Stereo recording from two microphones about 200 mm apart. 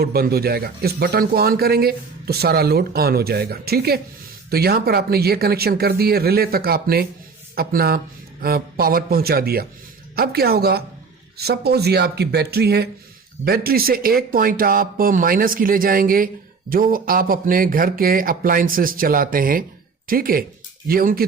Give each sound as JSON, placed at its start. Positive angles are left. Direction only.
{"t": 0.0, "sound": "speech", "side_deg": -50}